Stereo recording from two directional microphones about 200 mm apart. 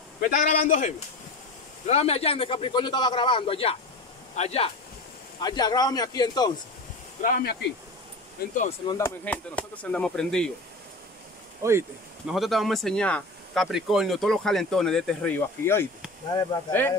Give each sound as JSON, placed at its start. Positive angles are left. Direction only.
{"t": 0.2, "sound": "a man's voice", "side_deg": 40}
{"t": 5.4, "sound": "a man's voice", "side_deg": 20}
{"t": 7.2, "sound": "a man's voice", "side_deg": 40}
{"t": 8.8, "sound": "speech", "side_deg": 15}
{"t": 11.6, "sound": "speech", "side_deg": -15}
{"t": 12.3, "sound": "speech", "side_deg": 0}